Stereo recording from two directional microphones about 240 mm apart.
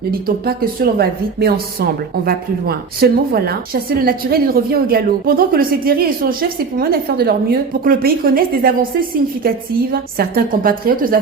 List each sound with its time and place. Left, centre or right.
0.3 s a woman's voice: right